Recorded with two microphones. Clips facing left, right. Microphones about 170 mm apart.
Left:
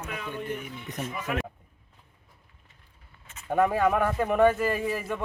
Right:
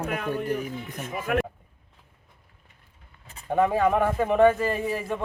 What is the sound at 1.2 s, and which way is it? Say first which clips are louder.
Speech: right 7 dB; 55° right (ahead or behind).